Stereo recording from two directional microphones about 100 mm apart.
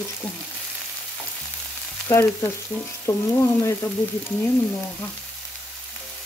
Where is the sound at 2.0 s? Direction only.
25° left (ahead or behind).